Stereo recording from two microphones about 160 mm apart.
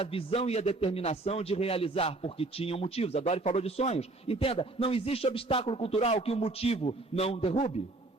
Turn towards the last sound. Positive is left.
turn(degrees=40)  # may be behind; listen again after turning